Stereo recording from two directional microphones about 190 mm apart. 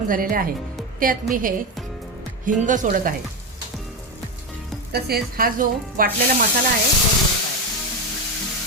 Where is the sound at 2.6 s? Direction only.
45° right (ahead or behind).